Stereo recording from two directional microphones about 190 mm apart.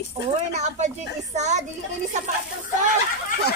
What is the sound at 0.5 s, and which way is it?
Speech, 35° right (ahead or behind).